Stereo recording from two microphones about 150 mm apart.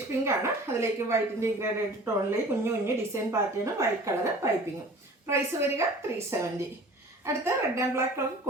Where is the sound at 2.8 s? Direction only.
15° right (ahead or behind).